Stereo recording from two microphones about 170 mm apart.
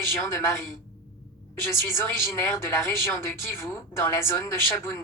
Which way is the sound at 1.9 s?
15° left (ahead or behind).